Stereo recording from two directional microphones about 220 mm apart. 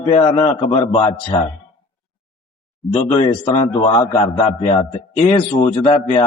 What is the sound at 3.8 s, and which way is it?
Speech, 15° left (ahead or behind).